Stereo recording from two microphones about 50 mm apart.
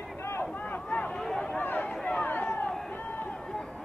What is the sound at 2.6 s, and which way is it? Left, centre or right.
Run, centre.